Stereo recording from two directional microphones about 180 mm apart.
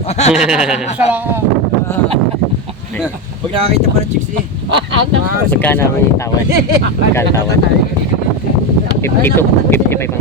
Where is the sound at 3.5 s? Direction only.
30° right (ahead or behind).